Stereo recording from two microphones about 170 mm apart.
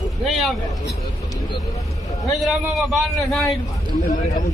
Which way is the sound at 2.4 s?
Centre (ahead or behind).